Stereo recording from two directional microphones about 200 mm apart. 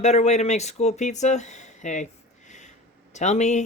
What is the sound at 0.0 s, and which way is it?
Speech, 35° left (ahead or behind).